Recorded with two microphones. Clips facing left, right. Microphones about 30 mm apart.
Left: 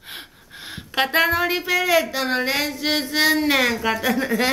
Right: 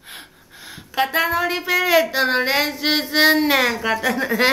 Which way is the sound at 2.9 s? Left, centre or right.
Centre.